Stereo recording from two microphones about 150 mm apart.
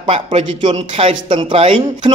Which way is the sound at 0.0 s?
40° right (ahead or behind).